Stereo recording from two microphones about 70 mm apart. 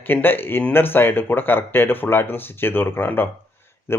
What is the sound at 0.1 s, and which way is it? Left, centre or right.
Speech, left.